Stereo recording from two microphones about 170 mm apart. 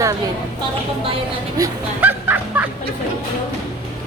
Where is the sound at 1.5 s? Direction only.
15° right (ahead or behind).